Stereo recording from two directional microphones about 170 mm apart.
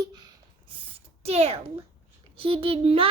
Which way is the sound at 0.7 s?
35° right (ahead or behind).